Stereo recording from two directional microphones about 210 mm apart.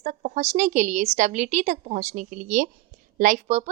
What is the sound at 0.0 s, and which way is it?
A woman's voice, 35° right (ahead or behind).